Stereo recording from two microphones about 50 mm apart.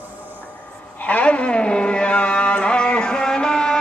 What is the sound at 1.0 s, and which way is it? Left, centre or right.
Music, left.